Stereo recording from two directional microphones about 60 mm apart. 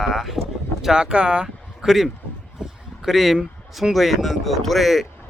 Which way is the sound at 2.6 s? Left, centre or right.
Centre.